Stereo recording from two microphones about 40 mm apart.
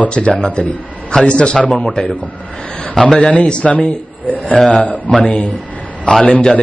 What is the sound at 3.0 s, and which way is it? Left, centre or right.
Speech, centre.